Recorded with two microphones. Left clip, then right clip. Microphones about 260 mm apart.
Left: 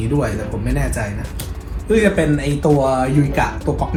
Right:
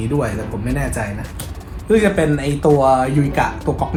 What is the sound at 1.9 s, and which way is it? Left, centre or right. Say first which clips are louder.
Speech: even; centre.